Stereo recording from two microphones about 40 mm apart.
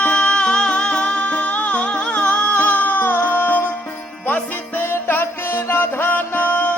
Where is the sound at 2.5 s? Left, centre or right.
Left.